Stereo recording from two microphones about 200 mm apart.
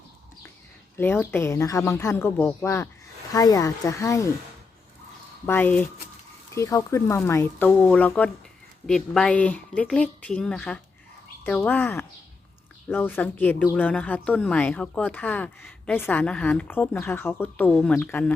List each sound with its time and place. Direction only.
0.9 s speech: 10° left (ahead or behind)
5.5 s a woman's voice: 10° left (ahead or behind)